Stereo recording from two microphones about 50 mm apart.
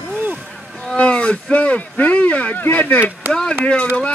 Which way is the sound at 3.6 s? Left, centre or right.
Left.